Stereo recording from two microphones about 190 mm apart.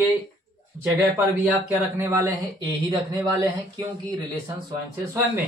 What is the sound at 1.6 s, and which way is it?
Speech, 10° right (ahead or behind).